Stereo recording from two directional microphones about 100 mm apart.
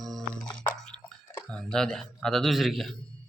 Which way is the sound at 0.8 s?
10° left (ahead or behind).